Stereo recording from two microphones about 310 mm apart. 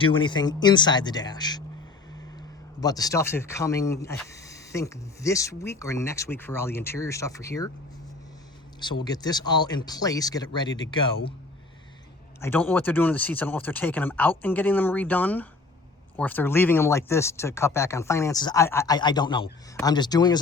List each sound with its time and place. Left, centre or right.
0.0 s speech: centre
2.8 s speech: centre
9.0 s speech: centre
12.4 s speech: centre